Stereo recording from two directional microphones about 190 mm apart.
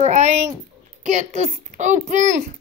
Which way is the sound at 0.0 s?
40° right (ahead or behind).